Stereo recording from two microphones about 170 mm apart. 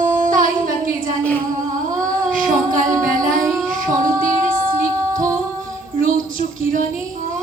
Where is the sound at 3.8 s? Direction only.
50° right (ahead or behind).